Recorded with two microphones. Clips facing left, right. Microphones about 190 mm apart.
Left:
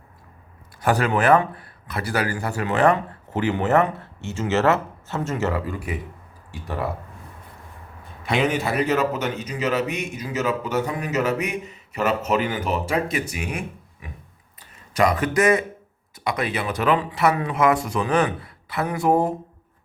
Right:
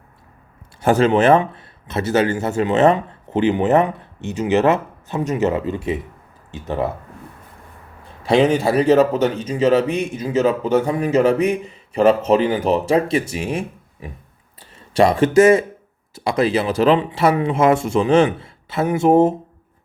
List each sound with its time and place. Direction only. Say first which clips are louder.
0.8 s a man's voice: right 6 dB; 25° right (ahead or behind)
8.2 s a man's voice: right 7 dB; 30° right (ahead or behind)